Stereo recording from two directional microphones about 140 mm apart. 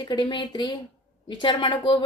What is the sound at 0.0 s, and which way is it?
A woman's voice, 30° left (ahead or behind).